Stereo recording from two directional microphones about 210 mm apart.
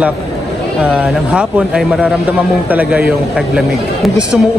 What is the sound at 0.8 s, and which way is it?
A man's voice, 5° right (ahead or behind).